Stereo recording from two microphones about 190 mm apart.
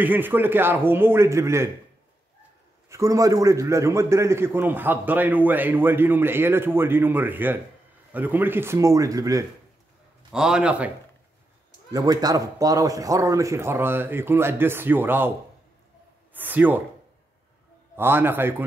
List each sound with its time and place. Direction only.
0.0 s a man's voice: 10° right (ahead or behind)
2.9 s a man's voice: 15° right (ahead or behind)
10.3 s a man's voice: 5° right (ahead or behind)
11.9 s a man's voice: 20° right (ahead or behind)
16.3 s a man's voice: 10° right (ahead or behind)
17.9 s a man's voice: 10° right (ahead or behind)